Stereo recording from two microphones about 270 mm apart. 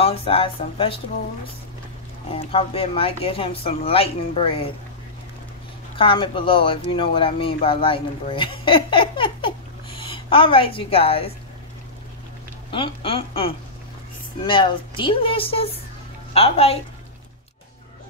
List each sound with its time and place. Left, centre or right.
0.0 s speech: left
2.3 s speech: left
5.9 s speech: centre
12.7 s speech: centre